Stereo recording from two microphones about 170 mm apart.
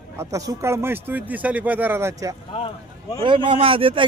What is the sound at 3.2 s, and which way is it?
Speech, 30° right (ahead or behind).